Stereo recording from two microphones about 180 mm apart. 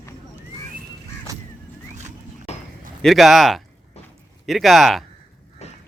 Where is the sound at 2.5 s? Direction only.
40° left (ahead or behind).